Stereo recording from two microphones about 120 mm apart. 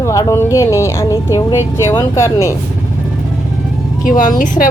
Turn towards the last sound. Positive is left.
turn(degrees=90)